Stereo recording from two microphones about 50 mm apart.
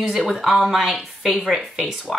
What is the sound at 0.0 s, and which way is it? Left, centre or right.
A woman's voice, centre.